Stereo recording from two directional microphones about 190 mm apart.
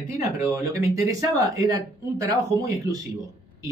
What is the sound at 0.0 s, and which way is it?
Speech, 15° right (ahead or behind).